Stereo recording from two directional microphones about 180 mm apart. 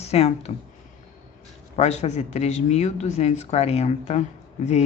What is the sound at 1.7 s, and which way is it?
Speech, 40° left (ahead or behind).